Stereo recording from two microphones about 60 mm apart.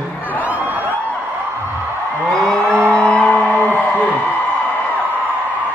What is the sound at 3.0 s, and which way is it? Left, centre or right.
Speech, centre.